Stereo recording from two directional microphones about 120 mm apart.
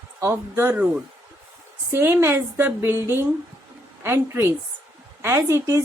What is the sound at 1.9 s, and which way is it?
Speech, 20° right (ahead or behind).